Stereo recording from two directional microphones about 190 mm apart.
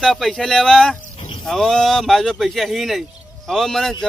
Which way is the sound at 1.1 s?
30° left (ahead or behind).